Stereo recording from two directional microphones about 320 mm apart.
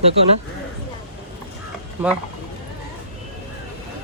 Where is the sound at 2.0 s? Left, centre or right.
Centre.